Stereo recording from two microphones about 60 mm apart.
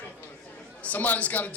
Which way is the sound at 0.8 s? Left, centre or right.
Left.